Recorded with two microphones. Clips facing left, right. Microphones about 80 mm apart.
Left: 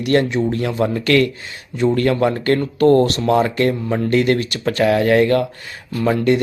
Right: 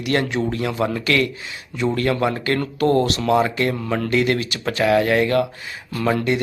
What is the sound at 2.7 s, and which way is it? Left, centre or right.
Speech, left.